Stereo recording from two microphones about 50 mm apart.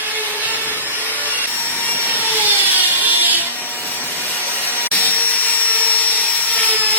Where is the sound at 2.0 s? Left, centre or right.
Right.